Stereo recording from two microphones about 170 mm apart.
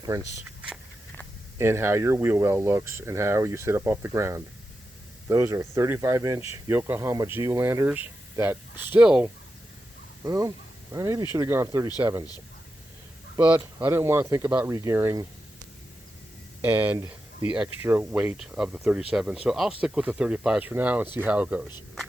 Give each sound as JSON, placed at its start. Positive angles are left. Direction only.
{"t": 0.0, "sound": "speech", "side_deg": -20}
{"t": 1.5, "sound": "speech", "side_deg": -15}
{"t": 10.2, "sound": "speech", "side_deg": -20}
{"t": 13.3, "sound": "speech", "side_deg": -15}
{"t": 16.6, "sound": "speech", "side_deg": -10}